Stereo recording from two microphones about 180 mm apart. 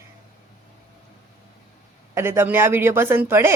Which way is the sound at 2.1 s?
15° right (ahead or behind).